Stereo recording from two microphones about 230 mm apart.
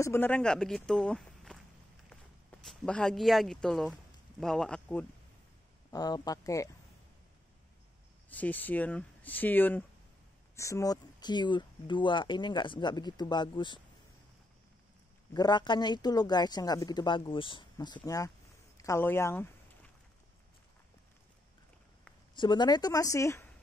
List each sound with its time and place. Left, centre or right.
0.0 s speech: centre
2.6 s speech: centre
5.9 s speech: centre
8.3 s speech: centre
15.3 s speech: centre
18.8 s a sound: centre
22.3 s speech: centre